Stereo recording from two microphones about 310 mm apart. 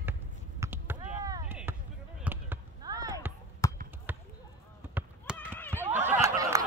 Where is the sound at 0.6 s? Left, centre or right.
Centre.